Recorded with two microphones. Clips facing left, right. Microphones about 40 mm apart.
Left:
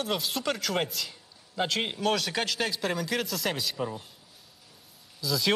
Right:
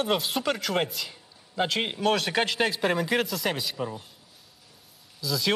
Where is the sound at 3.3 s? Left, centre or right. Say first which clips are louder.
Right 2 dB; centre.